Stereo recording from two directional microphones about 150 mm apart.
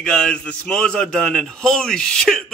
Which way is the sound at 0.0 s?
5° left (ahead or behind).